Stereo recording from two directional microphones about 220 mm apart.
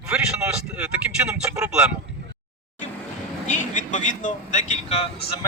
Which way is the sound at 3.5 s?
35° left (ahead or behind).